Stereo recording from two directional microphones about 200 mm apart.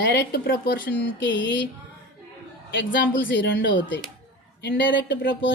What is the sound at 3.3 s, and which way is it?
A woman's voice, 65° left (ahead or behind).